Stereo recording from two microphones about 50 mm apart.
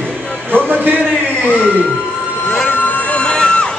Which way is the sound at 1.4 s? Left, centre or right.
Left.